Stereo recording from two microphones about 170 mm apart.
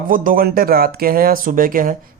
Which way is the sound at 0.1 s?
55° right (ahead or behind).